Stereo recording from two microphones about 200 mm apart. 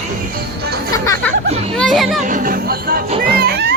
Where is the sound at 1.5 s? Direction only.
30° right (ahead or behind).